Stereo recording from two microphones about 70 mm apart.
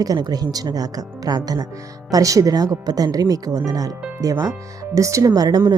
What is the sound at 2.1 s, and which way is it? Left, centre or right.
Speech, right.